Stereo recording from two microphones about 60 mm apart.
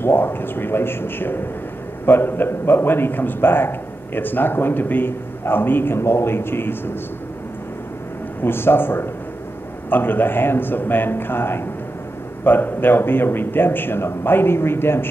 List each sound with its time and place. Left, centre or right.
0.0 s a man's voice: left
8.4 s a man's voice: left